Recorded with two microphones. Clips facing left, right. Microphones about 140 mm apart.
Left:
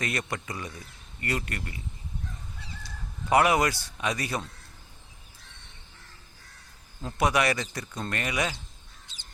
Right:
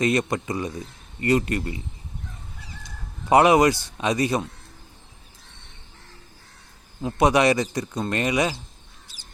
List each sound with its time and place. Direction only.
0.0 s speech: 20° right (ahead or behind)
2.8 s speech: 25° right (ahead or behind)
7.0 s speech: 20° right (ahead or behind)
9.1 s crow: 20° left (ahead or behind)